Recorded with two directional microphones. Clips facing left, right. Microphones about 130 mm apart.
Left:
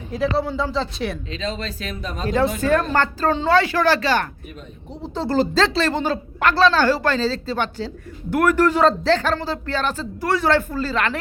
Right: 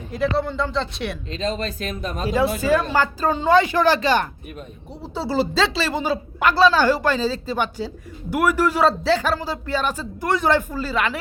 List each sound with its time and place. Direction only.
0.1 s speech: centre (ahead or behind)
1.3 s speech: 45° right (ahead or behind)
2.2 s speech: 10° right (ahead or behind)
5.0 s speech: 5° right (ahead or behind)